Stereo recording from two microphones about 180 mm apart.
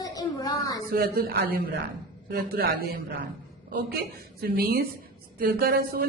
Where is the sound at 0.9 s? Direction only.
55° right (ahead or behind).